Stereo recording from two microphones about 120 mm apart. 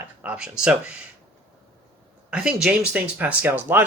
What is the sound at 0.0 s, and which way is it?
Speech, 15° right (ahead or behind).